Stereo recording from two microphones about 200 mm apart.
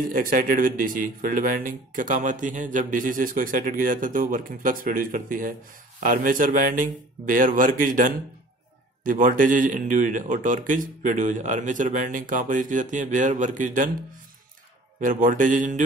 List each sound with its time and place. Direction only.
0.1 s a man's voice: 45° right (ahead or behind)
15.0 s a man's voice: 40° right (ahead or behind)